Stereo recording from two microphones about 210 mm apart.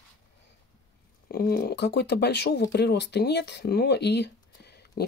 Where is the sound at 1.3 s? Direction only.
50° left (ahead or behind).